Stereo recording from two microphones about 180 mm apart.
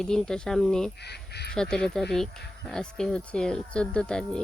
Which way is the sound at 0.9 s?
65° left (ahead or behind).